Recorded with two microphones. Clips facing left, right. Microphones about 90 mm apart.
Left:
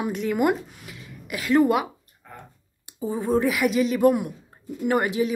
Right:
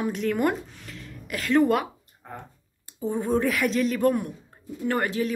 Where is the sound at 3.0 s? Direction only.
Centre (ahead or behind).